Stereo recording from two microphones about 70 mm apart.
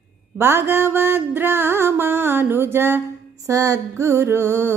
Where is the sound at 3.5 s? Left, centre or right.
Right.